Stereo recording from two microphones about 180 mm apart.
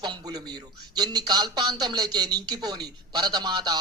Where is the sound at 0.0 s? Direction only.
25° right (ahead or behind).